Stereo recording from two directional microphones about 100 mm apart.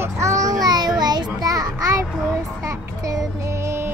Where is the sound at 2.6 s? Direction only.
30° right (ahead or behind).